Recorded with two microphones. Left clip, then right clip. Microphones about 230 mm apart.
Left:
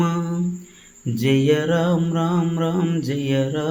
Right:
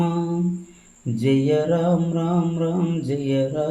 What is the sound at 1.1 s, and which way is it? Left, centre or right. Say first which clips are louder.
Mantra: left 1 dB; left.